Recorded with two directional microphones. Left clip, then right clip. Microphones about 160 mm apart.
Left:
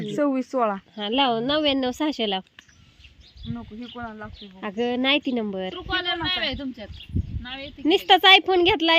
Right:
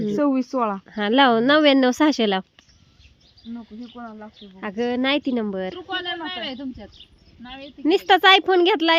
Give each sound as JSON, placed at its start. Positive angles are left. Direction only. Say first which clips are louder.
{"t": 0.2, "sound": "speech", "louder": "even", "side_deg": -45}
{"t": 3.5, "sound": "speech", "louder": "left 1 dB", "side_deg": -10}
{"t": 5.7, "sound": "a man's voice", "louder": "left 2 dB", "side_deg": 15}
{"t": 7.9, "sound": "speech", "louder": "even", "side_deg": -15}